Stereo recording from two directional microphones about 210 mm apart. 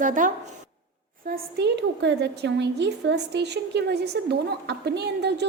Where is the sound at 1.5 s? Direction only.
55° right (ahead or behind).